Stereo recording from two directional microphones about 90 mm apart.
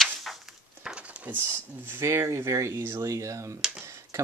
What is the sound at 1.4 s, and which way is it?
Speech, 25° right (ahead or behind).